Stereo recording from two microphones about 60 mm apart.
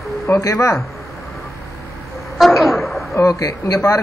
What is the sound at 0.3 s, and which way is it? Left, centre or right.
Speech, left.